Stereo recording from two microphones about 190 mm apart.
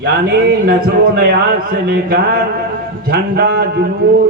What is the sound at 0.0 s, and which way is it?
A man's voice, 55° right (ahead or behind).